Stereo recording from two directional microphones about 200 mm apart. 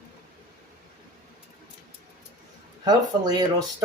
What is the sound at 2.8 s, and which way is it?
Speech, 20° right (ahead or behind).